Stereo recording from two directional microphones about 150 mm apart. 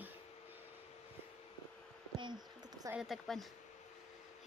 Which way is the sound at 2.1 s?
30° right (ahead or behind).